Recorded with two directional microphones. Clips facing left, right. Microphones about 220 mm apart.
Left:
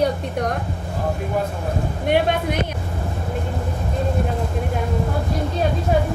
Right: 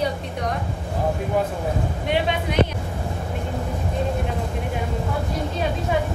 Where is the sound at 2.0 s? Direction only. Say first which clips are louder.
Left 5 dB; 50° left (ahead or behind).